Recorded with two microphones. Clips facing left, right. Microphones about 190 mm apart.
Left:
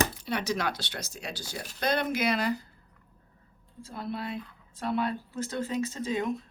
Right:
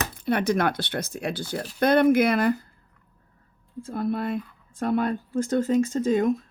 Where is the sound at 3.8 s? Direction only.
50° right (ahead or behind).